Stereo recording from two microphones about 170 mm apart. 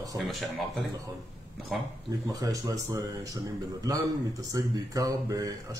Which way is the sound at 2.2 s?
20° right (ahead or behind).